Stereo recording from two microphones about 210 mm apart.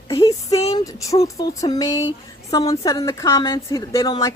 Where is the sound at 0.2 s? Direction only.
15° left (ahead or behind).